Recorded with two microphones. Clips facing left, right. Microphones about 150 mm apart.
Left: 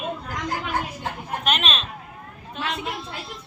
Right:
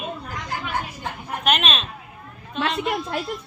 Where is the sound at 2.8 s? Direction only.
65° right (ahead or behind).